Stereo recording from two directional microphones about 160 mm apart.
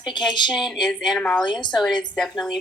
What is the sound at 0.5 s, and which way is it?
Speech, centre (ahead or behind).